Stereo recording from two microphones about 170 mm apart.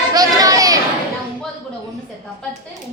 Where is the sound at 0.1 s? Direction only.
20° right (ahead or behind).